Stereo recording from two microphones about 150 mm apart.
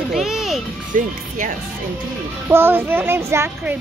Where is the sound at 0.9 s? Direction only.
60° right (ahead or behind).